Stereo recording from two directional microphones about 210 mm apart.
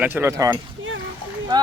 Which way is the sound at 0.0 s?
10° right (ahead or behind).